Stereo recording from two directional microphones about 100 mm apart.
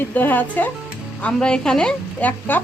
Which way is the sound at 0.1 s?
15° left (ahead or behind).